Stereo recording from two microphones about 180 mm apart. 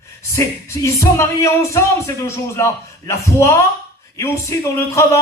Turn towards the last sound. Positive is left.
turn(degrees=15)  # may be behind; listen again after turning